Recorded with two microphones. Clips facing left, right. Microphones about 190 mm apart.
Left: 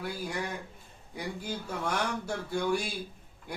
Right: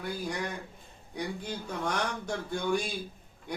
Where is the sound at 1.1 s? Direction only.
5° left (ahead or behind).